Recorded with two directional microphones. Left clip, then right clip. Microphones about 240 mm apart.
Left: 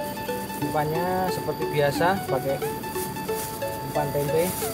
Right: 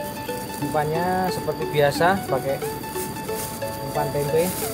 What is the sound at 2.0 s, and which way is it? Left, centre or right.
Speech, centre.